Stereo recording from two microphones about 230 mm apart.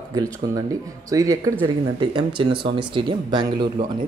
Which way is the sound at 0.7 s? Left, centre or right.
Centre.